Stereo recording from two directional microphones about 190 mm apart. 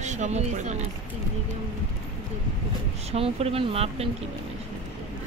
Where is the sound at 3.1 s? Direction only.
30° right (ahead or behind).